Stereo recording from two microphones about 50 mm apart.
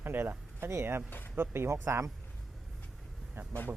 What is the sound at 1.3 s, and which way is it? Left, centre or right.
Speech, right.